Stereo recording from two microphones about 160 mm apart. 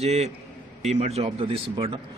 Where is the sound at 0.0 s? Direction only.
40° right (ahead or behind).